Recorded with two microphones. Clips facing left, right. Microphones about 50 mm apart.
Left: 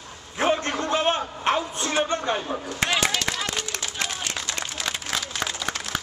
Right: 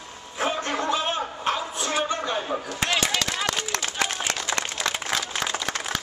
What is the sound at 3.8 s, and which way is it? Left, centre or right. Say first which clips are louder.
Run: right 3 dB; right.